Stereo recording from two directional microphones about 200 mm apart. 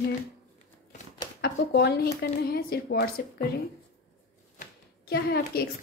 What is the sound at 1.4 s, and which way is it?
A woman's voice, 55° left (ahead or behind).